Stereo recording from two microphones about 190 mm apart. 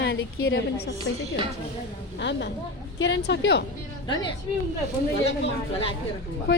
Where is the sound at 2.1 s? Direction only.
65° left (ahead or behind).